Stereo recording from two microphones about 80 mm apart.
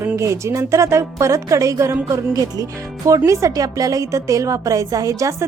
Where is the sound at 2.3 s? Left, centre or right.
Right.